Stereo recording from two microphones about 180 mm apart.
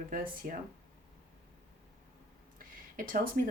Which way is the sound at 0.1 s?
50° right (ahead or behind).